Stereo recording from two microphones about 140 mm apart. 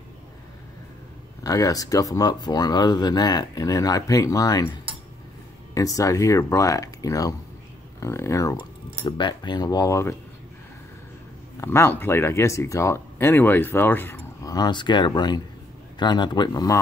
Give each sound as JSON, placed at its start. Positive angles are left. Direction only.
{"t": 1.4, "sound": "speech", "side_deg": 25}
{"t": 5.8, "sound": "speech", "side_deg": 25}
{"t": 9.0, "sound": "speech", "side_deg": 35}
{"t": 11.6, "sound": "speech", "side_deg": 15}
{"t": 14.4, "sound": "speech", "side_deg": 30}